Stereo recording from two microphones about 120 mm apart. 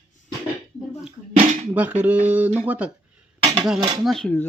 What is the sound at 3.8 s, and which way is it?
Speech, 35° right (ahead or behind).